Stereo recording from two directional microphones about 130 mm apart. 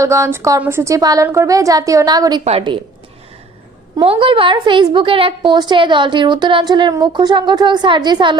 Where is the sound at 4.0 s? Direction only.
40° right (ahead or behind).